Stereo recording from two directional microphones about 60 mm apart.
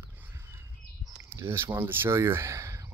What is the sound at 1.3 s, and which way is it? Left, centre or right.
Speech, right.